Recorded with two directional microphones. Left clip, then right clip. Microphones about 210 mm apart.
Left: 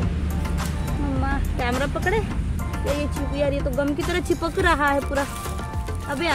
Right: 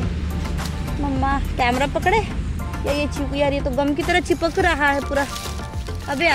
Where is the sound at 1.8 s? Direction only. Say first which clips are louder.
Right 5 dB; 20° right (ahead or behind).